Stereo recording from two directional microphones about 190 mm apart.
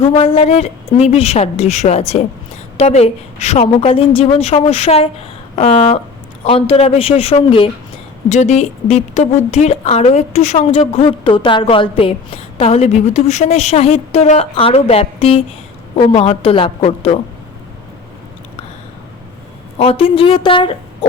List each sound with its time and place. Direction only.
0.0 s a woman's voice: 30° left (ahead or behind)
19.8 s a woman's voice: 30° left (ahead or behind)